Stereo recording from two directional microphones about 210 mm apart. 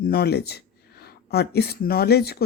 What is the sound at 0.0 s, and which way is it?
A woman's voice, 50° left (ahead or behind).